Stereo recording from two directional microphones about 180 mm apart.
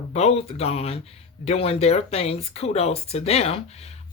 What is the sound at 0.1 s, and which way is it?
Speech, 35° left (ahead or behind).